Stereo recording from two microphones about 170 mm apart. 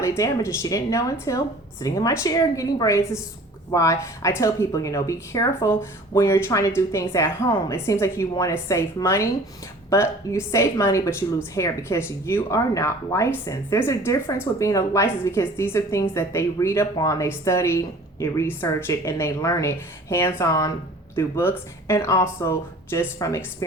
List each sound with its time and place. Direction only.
0.0 s speech: 15° left (ahead or behind)